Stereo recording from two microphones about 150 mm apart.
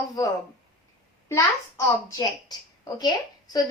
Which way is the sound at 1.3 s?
25° left (ahead or behind).